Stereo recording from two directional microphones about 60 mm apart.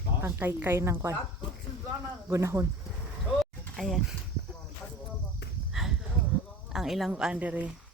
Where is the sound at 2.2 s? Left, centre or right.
Right.